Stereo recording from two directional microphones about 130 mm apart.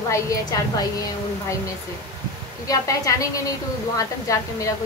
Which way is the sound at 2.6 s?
25° left (ahead or behind).